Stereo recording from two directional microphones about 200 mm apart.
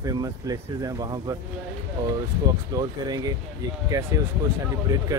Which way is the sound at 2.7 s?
20° right (ahead or behind).